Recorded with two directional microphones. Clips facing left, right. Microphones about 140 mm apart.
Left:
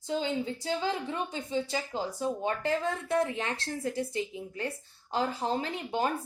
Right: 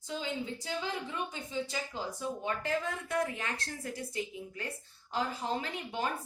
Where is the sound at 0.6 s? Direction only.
30° left (ahead or behind).